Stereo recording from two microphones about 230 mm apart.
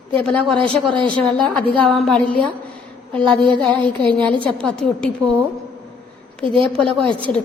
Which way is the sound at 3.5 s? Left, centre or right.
Centre.